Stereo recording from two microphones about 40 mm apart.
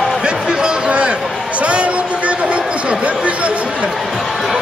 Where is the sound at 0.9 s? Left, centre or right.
Right.